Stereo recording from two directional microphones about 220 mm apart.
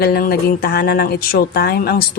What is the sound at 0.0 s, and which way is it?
A woman's voice, 45° left (ahead or behind).